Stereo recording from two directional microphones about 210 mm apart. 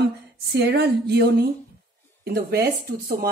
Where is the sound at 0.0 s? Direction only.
55° right (ahead or behind).